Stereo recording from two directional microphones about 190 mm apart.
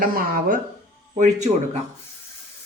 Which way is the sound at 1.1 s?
35° right (ahead or behind).